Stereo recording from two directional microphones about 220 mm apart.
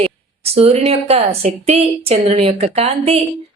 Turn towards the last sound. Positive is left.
turn(degrees=-30)  # may be behind; listen again after turning